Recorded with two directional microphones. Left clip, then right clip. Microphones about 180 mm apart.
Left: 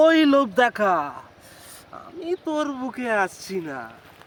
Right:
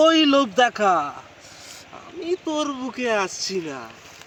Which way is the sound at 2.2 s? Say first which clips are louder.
Right 1 dB; 25° left (ahead or behind).